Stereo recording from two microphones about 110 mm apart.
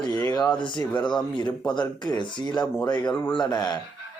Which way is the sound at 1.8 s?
40° left (ahead or behind).